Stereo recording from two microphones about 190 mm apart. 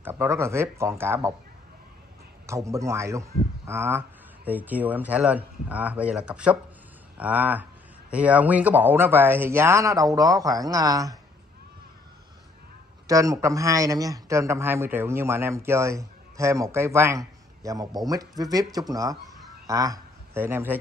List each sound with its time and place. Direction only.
0.0 s a man's voice: 10° right (ahead or behind)
2.4 s a man's voice: 15° right (ahead or behind)
13.0 s a man's voice: 15° right (ahead or behind)